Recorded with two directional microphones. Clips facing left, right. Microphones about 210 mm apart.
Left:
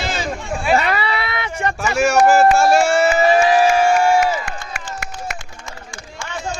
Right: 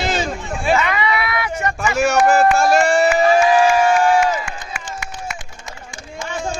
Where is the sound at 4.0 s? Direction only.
10° left (ahead or behind).